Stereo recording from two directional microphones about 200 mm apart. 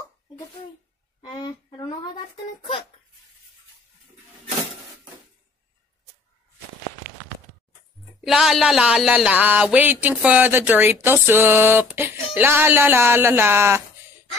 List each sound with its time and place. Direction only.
1.2 s speech: 20° left (ahead or behind)
8.2 s speech: centre (ahead or behind)